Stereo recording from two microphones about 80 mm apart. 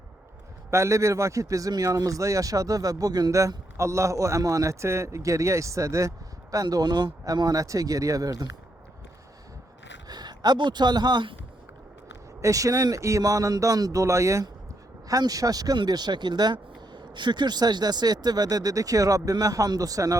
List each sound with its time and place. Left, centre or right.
0.7 s a man's voice: right
3.8 s a man's voice: right
10.1 s speech: right
12.4 s a man's voice: right